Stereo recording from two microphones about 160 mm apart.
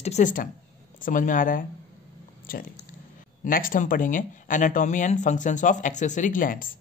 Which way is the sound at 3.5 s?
60° left (ahead or behind).